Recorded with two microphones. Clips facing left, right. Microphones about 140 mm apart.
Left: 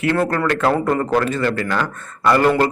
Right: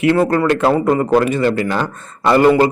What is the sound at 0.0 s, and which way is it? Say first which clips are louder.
Speech: right 5 dB; 15° right (ahead or behind).